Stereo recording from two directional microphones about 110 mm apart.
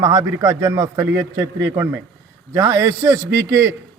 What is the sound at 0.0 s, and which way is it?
A man's voice, 30° right (ahead or behind).